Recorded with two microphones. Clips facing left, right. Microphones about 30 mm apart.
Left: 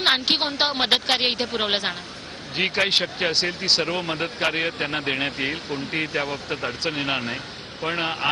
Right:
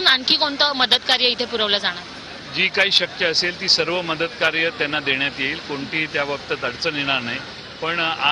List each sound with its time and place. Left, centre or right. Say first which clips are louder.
0.0 s speech: right 3 dB; centre